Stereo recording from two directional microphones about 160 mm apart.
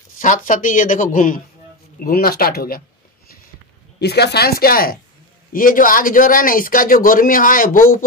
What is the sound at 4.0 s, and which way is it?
A man's voice, 90° left.